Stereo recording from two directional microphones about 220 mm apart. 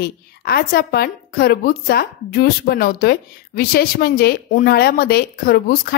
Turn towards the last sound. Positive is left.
turn(degrees=45)  # may be behind; listen again after turning